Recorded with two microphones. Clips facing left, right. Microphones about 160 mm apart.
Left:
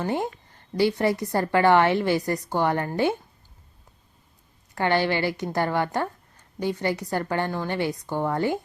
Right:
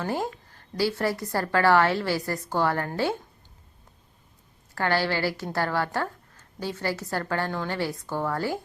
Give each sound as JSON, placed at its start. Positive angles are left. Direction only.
{"t": 0.0, "sound": "a woman's voice", "side_deg": 20}
{"t": 4.7, "sound": "a woman's voice", "side_deg": 20}